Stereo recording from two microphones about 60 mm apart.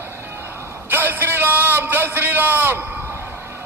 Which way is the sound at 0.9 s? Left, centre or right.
Right.